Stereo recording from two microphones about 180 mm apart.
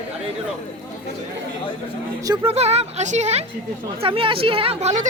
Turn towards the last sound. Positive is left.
turn(degrees=-40)  # may be behind; listen again after turning